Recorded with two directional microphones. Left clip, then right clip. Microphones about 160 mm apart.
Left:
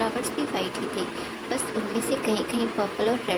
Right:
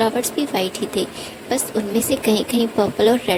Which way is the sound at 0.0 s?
60° right (ahead or behind).